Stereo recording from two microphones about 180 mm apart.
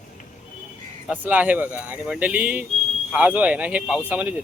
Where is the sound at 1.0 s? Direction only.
10° right (ahead or behind).